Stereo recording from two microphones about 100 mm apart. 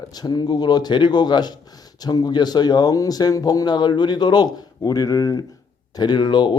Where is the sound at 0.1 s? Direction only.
40° left (ahead or behind).